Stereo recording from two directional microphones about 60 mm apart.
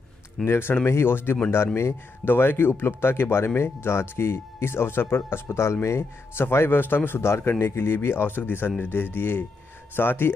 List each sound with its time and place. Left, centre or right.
0.5 s speech: left